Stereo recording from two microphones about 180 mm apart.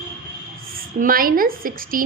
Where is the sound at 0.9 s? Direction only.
50° right (ahead or behind).